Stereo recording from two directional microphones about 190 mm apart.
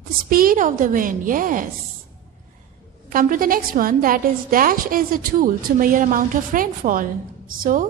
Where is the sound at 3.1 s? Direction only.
45° right (ahead or behind).